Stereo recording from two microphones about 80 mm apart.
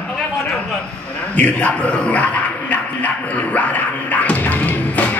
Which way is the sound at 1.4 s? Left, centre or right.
Centre.